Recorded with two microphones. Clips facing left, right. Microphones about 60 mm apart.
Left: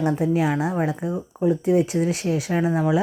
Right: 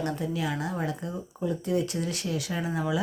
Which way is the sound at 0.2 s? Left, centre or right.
Left.